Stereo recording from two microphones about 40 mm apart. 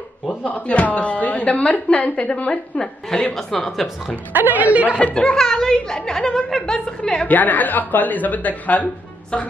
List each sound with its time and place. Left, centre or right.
0.5 s a woman's voice: left
2.8 s speech: centre
4.3 s a woman's voice: right
4.6 s speech: right
4.9 s speech: left
5.3 s speech: centre
7.2 s a woman's voice: left
9.3 s speech: centre